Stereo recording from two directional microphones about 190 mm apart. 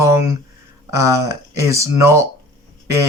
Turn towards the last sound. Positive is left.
turn(degrees=-15)  # may be behind; listen again after turning